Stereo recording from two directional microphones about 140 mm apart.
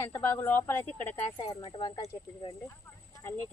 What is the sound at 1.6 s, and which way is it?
Speech, 35° left (ahead or behind).